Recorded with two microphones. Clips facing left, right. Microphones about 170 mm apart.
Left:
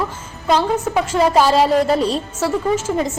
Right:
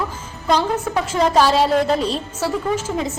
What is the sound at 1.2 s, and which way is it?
Speech, 5° left (ahead or behind).